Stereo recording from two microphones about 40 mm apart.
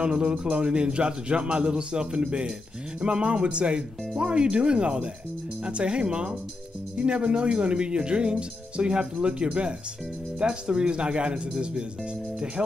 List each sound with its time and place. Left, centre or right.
0.0 s speech: right